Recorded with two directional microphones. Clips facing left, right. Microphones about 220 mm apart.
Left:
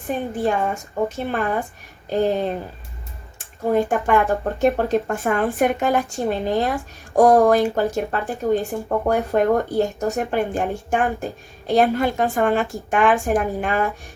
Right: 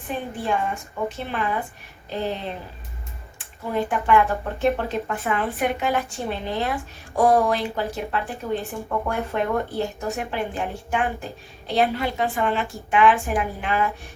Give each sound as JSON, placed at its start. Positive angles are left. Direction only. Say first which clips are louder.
{"t": 0.1, "sound": "speech", "louder": "left 4 dB", "side_deg": 45}